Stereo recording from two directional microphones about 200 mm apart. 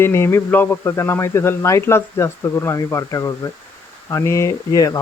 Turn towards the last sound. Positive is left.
turn(degrees=15)  # may be behind; listen again after turning